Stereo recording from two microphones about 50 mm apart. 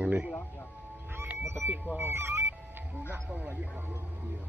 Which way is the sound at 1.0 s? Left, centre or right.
Right.